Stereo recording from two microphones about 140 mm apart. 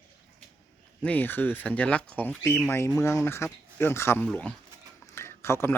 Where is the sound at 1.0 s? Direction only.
10° left (ahead or behind).